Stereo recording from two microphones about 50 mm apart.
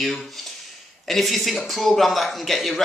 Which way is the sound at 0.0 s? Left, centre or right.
Centre.